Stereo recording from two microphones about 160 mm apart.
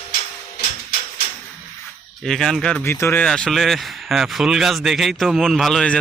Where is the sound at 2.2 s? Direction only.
5° left (ahead or behind).